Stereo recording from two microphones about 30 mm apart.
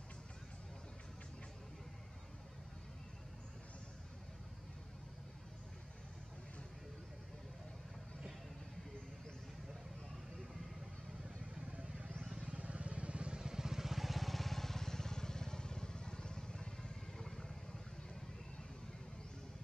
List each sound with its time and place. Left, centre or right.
11.2 s vehicle: right; by 16.9 s left